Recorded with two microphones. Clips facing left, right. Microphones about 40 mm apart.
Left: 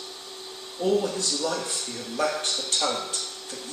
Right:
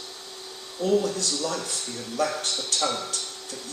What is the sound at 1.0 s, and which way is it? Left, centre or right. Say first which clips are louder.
Speech: even; left.